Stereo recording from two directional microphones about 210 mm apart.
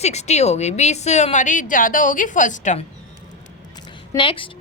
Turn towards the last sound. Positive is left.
turn(degrees=25)  # may be behind; listen again after turning